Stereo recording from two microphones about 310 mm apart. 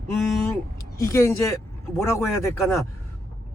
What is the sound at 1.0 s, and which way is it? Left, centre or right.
Speech, centre.